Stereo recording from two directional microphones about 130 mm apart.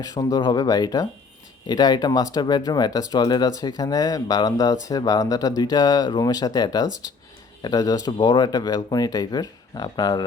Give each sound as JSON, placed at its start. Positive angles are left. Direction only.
{"t": 0.0, "sound": "speech", "side_deg": 25}